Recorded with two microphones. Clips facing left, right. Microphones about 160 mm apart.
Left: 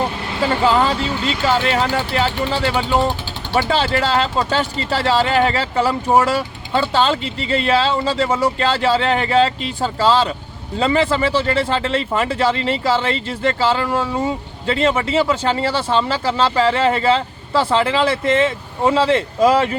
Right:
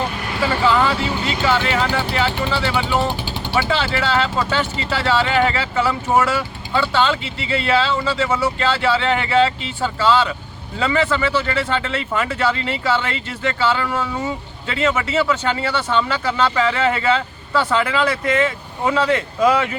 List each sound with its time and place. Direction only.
0.3 s vehicle: 25° left (ahead or behind)
0.6 s speech: 35° left (ahead or behind)